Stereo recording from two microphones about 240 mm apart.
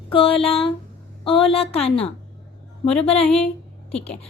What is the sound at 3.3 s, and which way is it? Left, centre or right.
Speech, centre.